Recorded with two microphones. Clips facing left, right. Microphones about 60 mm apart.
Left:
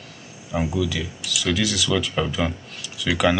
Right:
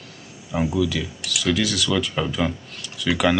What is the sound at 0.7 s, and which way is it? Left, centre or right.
Speech, centre.